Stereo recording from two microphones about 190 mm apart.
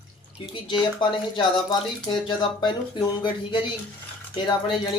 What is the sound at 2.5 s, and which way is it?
Speech, 20° left (ahead or behind).